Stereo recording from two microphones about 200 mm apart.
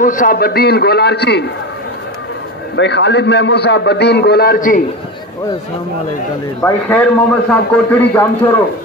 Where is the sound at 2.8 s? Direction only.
60° left (ahead or behind); by 4.8 s 45° left (ahead or behind).